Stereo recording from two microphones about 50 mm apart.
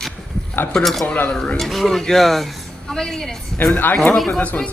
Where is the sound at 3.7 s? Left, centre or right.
Left.